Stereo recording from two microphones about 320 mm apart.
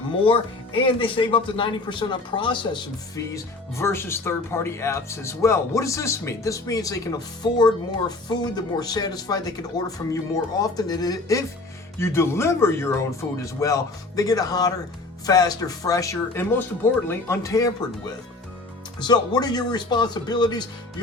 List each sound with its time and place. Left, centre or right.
0.3 s speech: centre
18.9 s speech: centre